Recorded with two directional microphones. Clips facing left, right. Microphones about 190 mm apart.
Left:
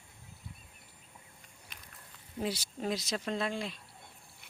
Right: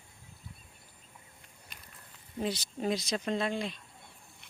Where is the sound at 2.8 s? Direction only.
Centre (ahead or behind).